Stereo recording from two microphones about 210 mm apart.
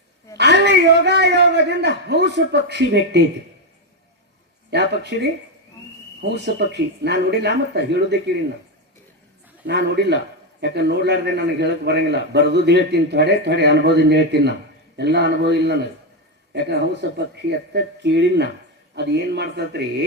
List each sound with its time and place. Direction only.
0.3 s a man's voice: 55° right (ahead or behind)
4.7 s a man's voice: 55° right (ahead or behind)
9.6 s a man's voice: 55° right (ahead or behind)